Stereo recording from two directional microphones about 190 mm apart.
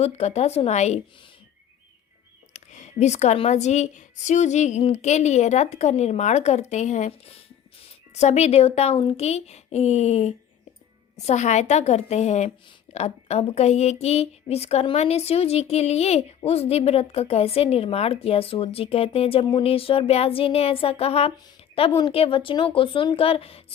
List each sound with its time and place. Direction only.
0.0 s a woman's voice: 35° left (ahead or behind)
2.5 s a woman's voice: 40° left (ahead or behind)